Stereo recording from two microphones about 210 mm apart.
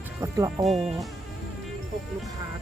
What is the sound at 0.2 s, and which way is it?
Music, 15° right (ahead or behind).